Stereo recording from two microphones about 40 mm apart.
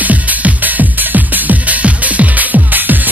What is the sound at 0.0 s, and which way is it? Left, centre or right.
Music, right.